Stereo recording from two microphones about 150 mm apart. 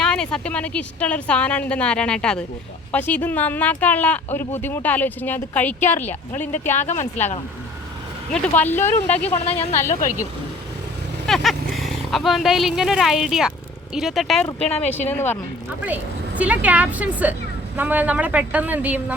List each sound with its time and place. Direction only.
0.0 s speech: 5° left (ahead or behind)
6.7 s speech: 50° left (ahead or behind)
8.3 s speech: 10° left (ahead or behind)
9.4 s speech: 45° left (ahead or behind)
9.9 s speech: 60° left (ahead or behind)
11.3 s speech: centre (ahead or behind)
14.8 s speech: 10° left (ahead or behind)
15.9 s a woman's voice: 10° right (ahead or behind)